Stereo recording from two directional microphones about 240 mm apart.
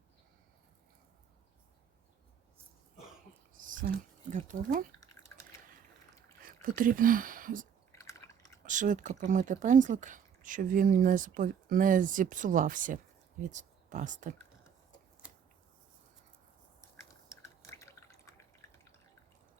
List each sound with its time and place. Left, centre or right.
3.5 s speech: right
5.3 s drip: centre
6.6 s speech: right
7.9 s drip: centre
8.6 s speech: right
17.0 s drip: centre